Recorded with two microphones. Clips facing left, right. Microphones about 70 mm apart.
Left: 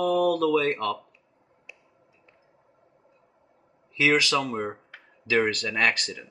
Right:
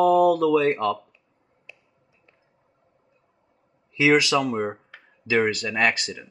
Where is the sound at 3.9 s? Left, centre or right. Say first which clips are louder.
Right 4 dB; centre.